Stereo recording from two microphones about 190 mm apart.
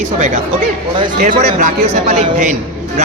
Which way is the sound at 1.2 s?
45° right (ahead or behind).